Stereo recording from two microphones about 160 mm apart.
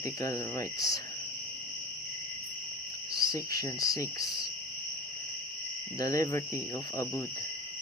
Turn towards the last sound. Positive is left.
turn(degrees=20)  # may be behind; listen again after turning